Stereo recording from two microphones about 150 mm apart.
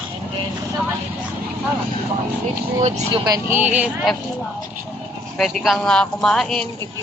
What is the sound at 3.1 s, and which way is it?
Speech, 30° right (ahead or behind).